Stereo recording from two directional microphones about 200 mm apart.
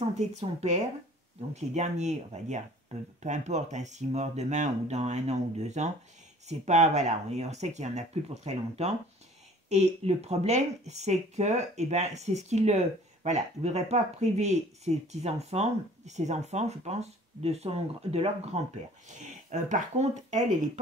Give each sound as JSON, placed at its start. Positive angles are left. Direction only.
{"t": 0.1, "sound": "speech", "side_deg": -35}